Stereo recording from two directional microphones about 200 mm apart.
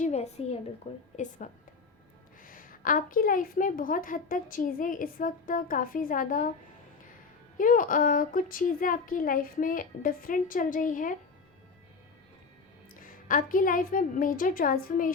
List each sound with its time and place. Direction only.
0.0 s a woman's voice: 35° left (ahead or behind)
7.6 s a woman's voice: 45° left (ahead or behind)
13.0 s a woman's voice: 45° left (ahead or behind)